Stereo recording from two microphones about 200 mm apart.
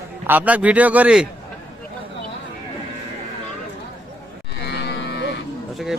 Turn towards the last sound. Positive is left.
turn(degrees=55)  # may be behind; listen again after turning